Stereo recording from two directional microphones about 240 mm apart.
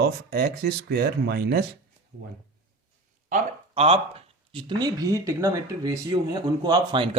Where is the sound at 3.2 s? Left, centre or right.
Right.